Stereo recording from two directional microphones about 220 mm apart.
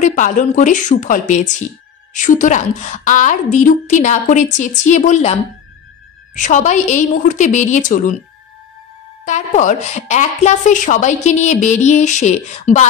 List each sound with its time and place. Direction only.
0.0 s a woman's voice: 35° left (ahead or behind)
6.3 s a woman's voice: 35° left (ahead or behind)
9.2 s a woman's voice: 35° left (ahead or behind)